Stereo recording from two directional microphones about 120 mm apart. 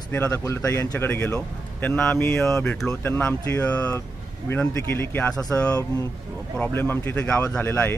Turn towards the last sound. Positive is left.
turn(degrees=15)  # may be behind; listen again after turning